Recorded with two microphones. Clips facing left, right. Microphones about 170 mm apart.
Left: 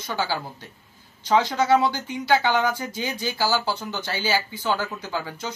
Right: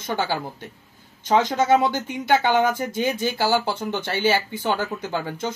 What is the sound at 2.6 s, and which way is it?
Speech, 50° right (ahead or behind).